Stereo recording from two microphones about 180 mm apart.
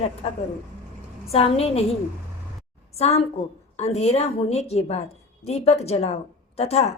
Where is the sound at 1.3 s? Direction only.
35° left (ahead or behind).